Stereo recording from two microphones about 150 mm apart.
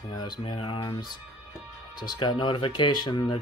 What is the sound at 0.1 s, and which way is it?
Speech, 30° left (ahead or behind).